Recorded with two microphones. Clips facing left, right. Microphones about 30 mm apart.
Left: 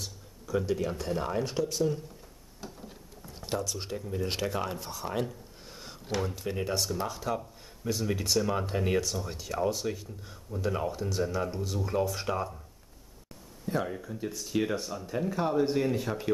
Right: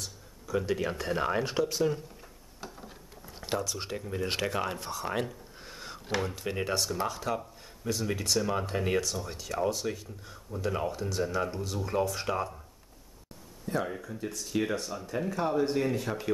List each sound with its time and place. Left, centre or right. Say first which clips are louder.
0.5 s speech: even; centre
2.6 s drawer open or close: even; centre
3.9 s speech: right 1 dB; centre
13.7 s speech: even; centre